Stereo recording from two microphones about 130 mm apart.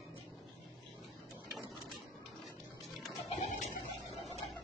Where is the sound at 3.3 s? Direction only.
65° left (ahead or behind).